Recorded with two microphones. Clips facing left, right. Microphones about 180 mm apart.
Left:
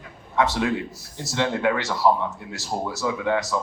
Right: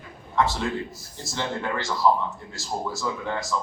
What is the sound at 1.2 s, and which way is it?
A woman's voice, 75° left (ahead or behind).